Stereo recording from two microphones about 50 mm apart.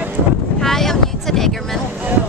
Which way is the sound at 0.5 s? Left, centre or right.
Centre.